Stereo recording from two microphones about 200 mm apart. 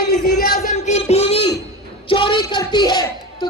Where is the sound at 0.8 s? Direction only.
35° left (ahead or behind).